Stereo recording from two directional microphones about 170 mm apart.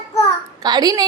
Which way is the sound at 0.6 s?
25° right (ahead or behind).